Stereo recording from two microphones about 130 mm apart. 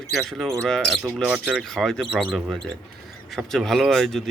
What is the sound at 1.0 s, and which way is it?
Speech, 10° right (ahead or behind).